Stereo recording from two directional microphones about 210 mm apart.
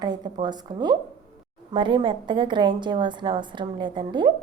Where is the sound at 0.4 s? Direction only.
20° right (ahead or behind).